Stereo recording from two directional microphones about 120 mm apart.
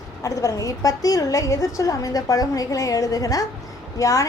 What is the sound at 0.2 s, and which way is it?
A woman's voice, 25° left (ahead or behind).